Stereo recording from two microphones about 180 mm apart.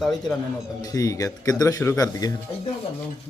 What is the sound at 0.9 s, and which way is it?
Speech, 20° left (ahead or behind).